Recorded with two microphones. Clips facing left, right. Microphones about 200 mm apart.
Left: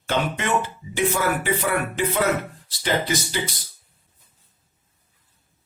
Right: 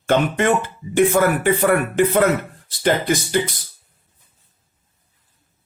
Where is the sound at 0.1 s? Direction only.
55° right (ahead or behind).